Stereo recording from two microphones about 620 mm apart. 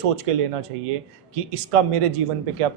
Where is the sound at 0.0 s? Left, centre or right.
Right.